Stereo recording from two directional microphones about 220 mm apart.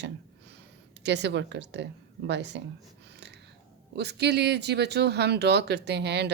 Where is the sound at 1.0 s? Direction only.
50° right (ahead or behind).